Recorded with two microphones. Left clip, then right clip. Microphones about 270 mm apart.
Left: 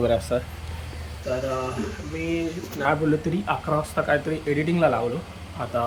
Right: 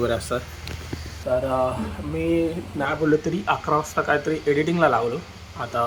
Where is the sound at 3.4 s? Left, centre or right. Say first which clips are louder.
Right 3 dB; centre.